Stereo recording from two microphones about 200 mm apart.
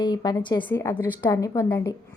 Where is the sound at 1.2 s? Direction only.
15° left (ahead or behind).